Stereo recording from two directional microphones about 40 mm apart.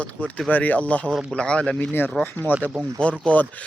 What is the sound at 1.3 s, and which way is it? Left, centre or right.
Speech, left.